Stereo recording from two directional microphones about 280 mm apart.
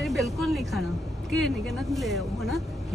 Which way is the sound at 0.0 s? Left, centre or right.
Centre.